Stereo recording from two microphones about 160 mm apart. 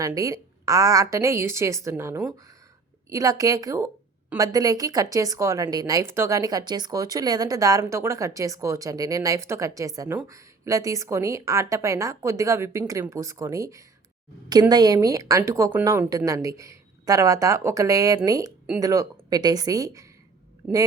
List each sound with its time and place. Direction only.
0.0 s a woman's voice: 20° right (ahead or behind)
20.6 s speech: 5° right (ahead or behind)